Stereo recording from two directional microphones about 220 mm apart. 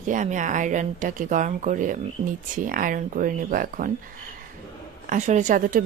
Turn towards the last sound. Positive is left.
turn(degrees=-35)  # may be behind; listen again after turning